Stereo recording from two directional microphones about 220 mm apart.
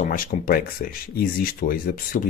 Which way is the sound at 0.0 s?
35° left (ahead or behind).